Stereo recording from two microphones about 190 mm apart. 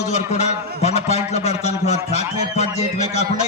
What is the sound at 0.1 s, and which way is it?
A man's voice, 35° left (ahead or behind).